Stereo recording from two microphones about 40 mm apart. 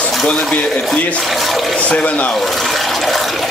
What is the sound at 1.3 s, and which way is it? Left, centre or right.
Speech, centre.